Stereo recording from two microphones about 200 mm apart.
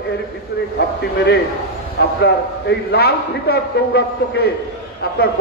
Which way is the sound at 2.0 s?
55° left (ahead or behind).